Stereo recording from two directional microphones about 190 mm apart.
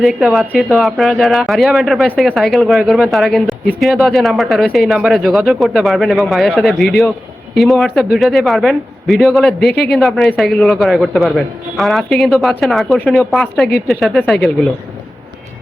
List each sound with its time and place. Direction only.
0.0 s speech: centre (ahead or behind)